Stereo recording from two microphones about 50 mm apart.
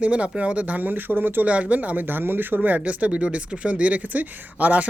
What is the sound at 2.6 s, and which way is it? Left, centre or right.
Speech, right.